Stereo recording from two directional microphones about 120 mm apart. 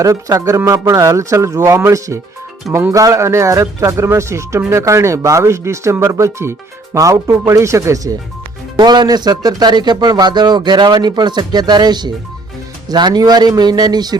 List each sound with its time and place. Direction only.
0.0 s speech: 25° right (ahead or behind)